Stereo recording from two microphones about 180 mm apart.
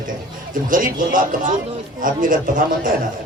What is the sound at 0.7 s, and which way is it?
A man's voice, 50° right (ahead or behind).